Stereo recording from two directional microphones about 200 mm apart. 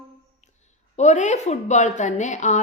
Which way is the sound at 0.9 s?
35° left (ahead or behind).